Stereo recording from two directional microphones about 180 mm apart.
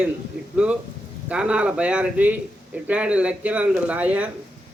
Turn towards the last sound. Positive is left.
turn(degrees=-10)  # may be behind; listen again after turning